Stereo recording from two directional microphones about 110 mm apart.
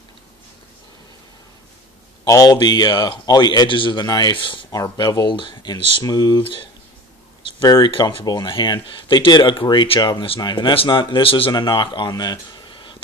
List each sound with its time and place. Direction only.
2.2 s speech: 35° left (ahead or behind); by 4.6 s 50° left (ahead or behind)
4.6 s speech: 30° left (ahead or behind); by 6.7 s 50° left (ahead or behind)
7.6 s speech: 35° left (ahead or behind)
8.3 s speech: 45° left (ahead or behind)
11.5 s speech: 45° left (ahead or behind)